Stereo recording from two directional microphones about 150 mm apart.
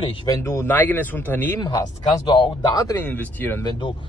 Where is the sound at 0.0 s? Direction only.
30° left (ahead or behind).